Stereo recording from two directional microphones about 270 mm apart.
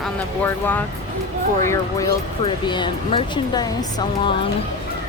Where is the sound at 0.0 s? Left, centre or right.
Centre.